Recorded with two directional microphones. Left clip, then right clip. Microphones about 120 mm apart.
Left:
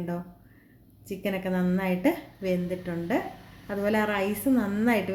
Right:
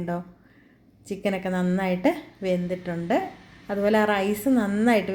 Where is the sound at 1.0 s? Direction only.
15° right (ahead or behind).